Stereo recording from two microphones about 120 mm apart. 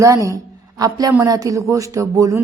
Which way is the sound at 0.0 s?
25° right (ahead or behind).